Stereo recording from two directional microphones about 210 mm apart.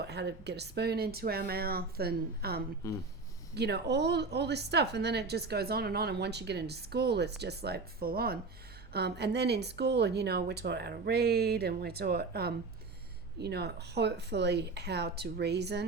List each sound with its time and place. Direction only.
0.0 s a woman's voice: 55° right (ahead or behind)